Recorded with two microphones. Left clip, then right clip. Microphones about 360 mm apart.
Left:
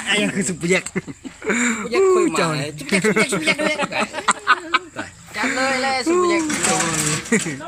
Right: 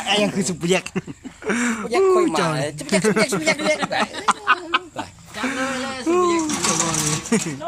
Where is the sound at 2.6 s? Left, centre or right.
Right.